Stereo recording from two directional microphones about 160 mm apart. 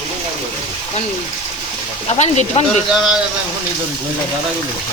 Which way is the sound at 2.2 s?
45° left (ahead or behind).